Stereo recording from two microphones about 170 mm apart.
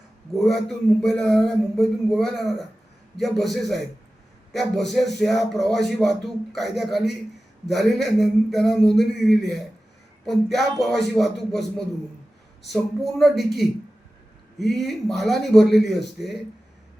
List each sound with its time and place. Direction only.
0.3 s speech: centre (ahead or behind)
12.7 s speech: centre (ahead or behind)